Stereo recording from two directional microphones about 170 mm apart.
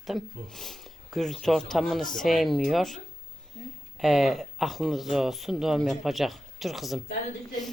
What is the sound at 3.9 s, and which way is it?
Speech, centre (ahead or behind).